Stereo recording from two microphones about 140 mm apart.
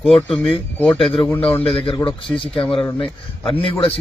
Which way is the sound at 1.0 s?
40° left (ahead or behind).